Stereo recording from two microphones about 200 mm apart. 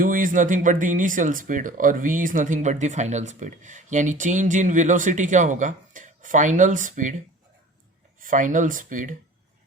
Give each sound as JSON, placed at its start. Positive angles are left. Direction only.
{"t": 0.0, "sound": "speech", "side_deg": -45}
{"t": 8.2, "sound": "speech", "side_deg": -40}